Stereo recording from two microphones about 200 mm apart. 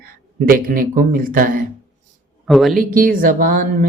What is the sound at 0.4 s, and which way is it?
Speech, 45° right (ahead or behind).